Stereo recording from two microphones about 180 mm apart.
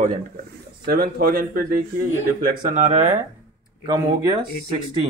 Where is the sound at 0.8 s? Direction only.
60° right (ahead or behind).